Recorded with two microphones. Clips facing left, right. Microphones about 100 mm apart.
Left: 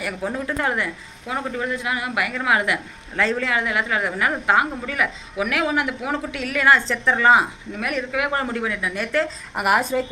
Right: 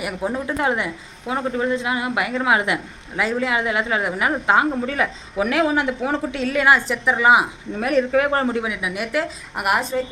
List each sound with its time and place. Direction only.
0.0 s a woman's voice: 20° right (ahead or behind)
6.7 s a woman's voice: 15° right (ahead or behind)
7.8 s speech: 35° right (ahead or behind)
8.4 s a woman's voice: 15° right (ahead or behind)
9.6 s a woman's voice: centre (ahead or behind)